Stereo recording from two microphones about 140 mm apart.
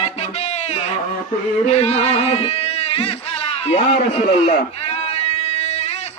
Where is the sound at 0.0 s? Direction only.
50° left (ahead or behind).